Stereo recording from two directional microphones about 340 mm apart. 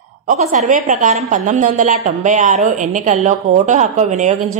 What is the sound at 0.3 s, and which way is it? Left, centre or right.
Speech, right.